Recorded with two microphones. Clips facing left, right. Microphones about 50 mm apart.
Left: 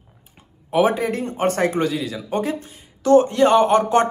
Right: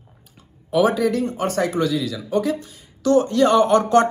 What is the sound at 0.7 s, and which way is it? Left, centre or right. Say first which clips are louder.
Speech: right 1 dB; left.